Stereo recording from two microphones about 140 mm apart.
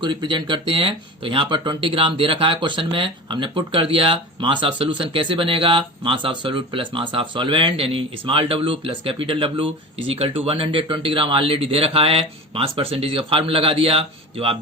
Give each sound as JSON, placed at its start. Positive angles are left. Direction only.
{"t": 0.0, "sound": "speech", "side_deg": -35}